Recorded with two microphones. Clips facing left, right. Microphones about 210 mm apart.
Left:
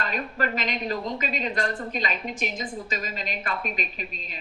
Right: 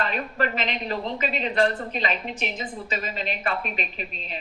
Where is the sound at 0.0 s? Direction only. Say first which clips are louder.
Right 2 dB; 40° left (ahead or behind).